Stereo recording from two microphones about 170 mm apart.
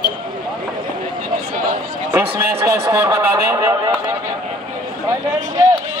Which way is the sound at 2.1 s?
15° right (ahead or behind).